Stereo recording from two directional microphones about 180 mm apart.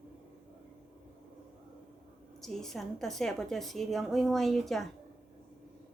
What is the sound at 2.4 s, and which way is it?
A woman's voice, centre (ahead or behind).